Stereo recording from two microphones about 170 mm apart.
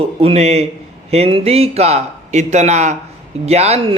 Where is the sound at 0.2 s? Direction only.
35° right (ahead or behind).